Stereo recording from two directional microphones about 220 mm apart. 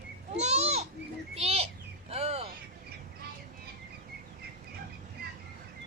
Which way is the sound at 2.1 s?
25° right (ahead or behind).